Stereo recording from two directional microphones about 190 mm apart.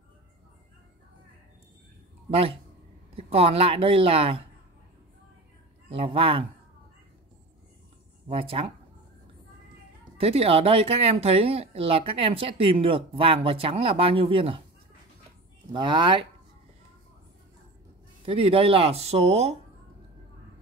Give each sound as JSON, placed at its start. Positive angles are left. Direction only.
{"t": 3.2, "sound": "speech", "side_deg": -30}
{"t": 5.9, "sound": "speech", "side_deg": -30}
{"t": 8.3, "sound": "speech", "side_deg": -30}
{"t": 10.1, "sound": "speech", "side_deg": -30}
{"t": 15.7, "sound": "speech", "side_deg": -25}
{"t": 18.2, "sound": "speech", "side_deg": -30}